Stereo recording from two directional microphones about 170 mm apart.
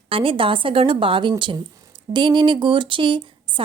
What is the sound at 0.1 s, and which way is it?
A woman's voice, 30° right (ahead or behind).